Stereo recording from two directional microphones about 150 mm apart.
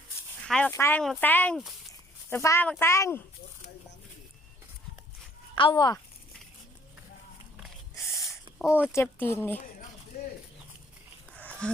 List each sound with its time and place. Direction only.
0.4 s speech: 5° left (ahead or behind)
0.7 s speech: 15° left (ahead or behind)
1.9 s a sound: 20° left (ahead or behind)
2.6 s speech: 15° left (ahead or behind)
5.5 s a child's voice: 30° left (ahead or behind)
8.6 s speech: 10° right (ahead or behind)
8.9 s speech: 15° left (ahead or behind)
10.1 s bird: 90° left
11.3 s dog: 10° left (ahead or behind)